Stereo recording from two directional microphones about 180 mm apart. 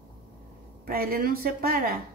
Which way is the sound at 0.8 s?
55° right (ahead or behind).